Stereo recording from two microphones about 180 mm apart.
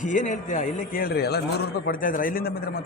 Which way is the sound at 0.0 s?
45° left (ahead or behind).